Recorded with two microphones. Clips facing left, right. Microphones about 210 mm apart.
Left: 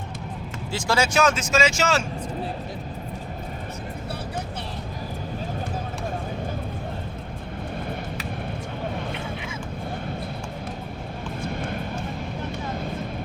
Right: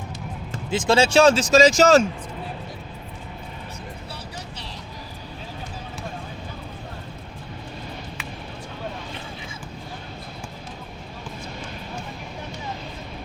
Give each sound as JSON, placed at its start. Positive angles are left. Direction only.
{"t": 0.7, "sound": "speech", "side_deg": -20}